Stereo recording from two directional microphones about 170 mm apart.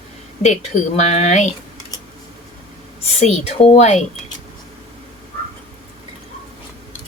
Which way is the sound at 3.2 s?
40° left (ahead or behind).